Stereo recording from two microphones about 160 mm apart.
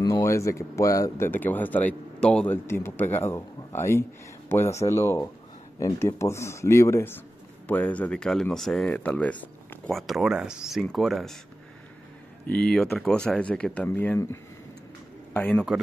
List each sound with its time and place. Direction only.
0.0 s speech: 15° left (ahead or behind); by 11.3 s centre (ahead or behind)
12.4 s a man's voice: 5° left (ahead or behind)